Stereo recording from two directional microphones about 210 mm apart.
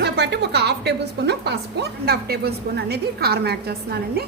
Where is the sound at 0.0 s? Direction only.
50° right (ahead or behind).